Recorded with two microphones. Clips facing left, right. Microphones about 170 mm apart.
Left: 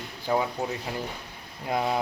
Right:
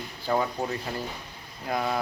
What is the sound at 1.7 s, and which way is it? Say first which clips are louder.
Speech: left 1 dB; 20° left (ahead or behind).